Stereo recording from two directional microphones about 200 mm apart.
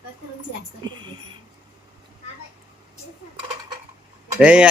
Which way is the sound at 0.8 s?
25° right (ahead or behind).